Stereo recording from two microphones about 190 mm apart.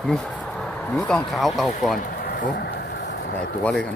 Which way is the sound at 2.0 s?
50° left (ahead or behind).